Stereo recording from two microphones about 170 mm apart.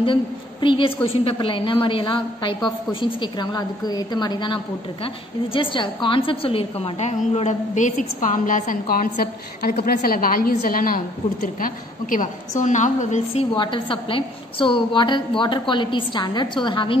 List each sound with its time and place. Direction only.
0.0 s a woman's voice: 30° left (ahead or behind)
13.6 s a woman's voice: 30° left (ahead or behind)